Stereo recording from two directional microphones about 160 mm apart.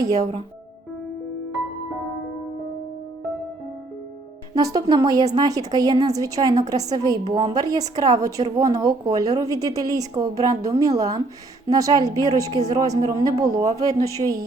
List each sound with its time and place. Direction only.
0.2 s speech: 40° right (ahead or behind)
4.5 s a woman's voice: 25° right (ahead or behind)